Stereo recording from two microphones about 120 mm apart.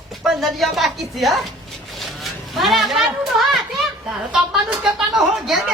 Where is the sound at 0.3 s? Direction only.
Centre (ahead or behind).